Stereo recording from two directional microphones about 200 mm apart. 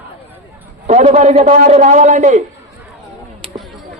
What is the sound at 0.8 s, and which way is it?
Speech, 35° right (ahead or behind).